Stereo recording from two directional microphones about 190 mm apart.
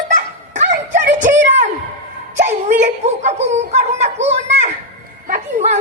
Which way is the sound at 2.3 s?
40° right (ahead or behind).